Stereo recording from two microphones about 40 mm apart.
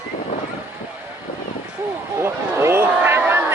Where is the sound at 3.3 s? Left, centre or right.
Right.